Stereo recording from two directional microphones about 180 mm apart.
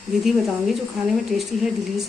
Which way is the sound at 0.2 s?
Centre (ahead or behind).